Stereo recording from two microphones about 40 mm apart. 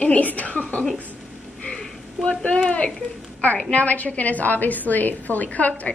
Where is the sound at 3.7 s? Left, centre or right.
Left.